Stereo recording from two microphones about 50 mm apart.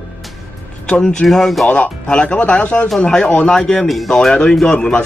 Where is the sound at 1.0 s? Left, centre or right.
Centre.